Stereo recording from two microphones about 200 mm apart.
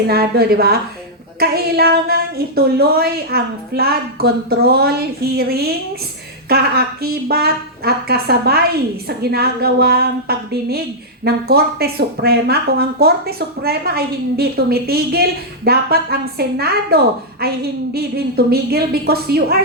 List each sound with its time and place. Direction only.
0.1 s speech: 50° right (ahead or behind)